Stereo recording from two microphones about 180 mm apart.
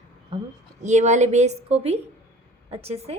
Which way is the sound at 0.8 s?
40° right (ahead or behind).